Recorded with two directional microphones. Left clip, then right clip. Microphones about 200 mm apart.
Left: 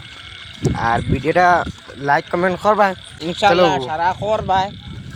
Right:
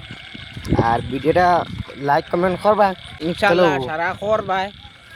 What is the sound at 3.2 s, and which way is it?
Speech, 15° right (ahead or behind).